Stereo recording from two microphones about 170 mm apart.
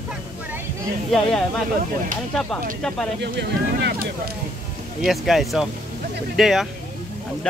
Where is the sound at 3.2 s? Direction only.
80° right.